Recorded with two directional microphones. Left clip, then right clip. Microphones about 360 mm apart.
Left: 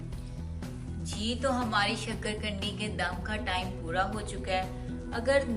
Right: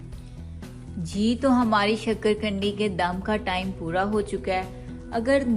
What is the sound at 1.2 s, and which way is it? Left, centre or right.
A woman's voice, centre.